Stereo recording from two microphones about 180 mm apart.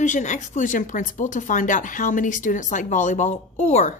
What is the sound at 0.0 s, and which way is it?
Speech, 45° left (ahead or behind).